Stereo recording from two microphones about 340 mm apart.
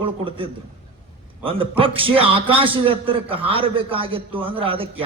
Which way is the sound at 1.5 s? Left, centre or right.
Centre.